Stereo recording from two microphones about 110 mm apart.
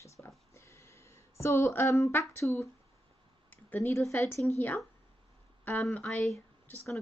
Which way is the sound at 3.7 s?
20° left (ahead or behind).